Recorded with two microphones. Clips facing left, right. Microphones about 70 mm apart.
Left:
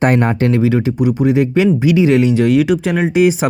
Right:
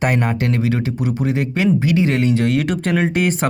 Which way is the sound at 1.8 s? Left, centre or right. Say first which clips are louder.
Left 5 dB; right.